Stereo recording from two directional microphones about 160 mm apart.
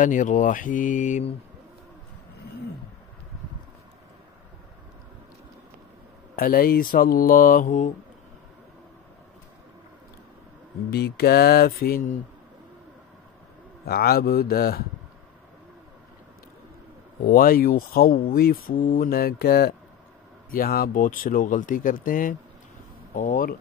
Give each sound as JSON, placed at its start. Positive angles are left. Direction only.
{"t": 0.0, "sound": "speech", "side_deg": 55}
{"t": 6.3, "sound": "speech", "side_deg": 65}
{"t": 10.9, "sound": "speech", "side_deg": 90}
{"t": 13.8, "sound": "speech", "side_deg": 75}
{"t": 17.2, "sound": "speech", "side_deg": 65}